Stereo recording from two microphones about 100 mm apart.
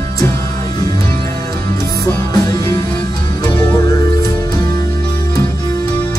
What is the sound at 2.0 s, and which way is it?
Music, 35° left (ahead or behind).